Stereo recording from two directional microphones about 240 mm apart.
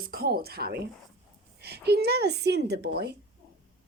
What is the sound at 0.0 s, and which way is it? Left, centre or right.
A woman's voice, right.